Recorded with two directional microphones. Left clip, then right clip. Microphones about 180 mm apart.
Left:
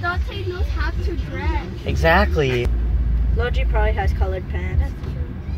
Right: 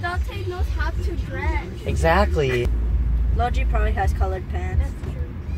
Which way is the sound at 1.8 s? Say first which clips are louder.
Left 3 dB; 15° right (ahead or behind).